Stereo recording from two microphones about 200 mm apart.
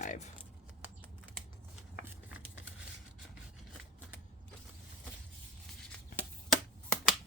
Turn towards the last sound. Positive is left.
turn(degrees=5)  # may be behind; listen again after turning